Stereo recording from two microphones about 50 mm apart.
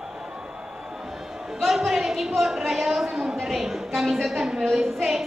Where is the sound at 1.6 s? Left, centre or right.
Centre.